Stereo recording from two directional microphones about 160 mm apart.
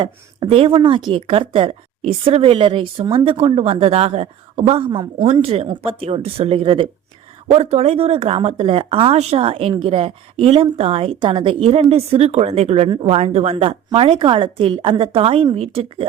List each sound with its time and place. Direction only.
0.0 s speech: 35° right (ahead or behind)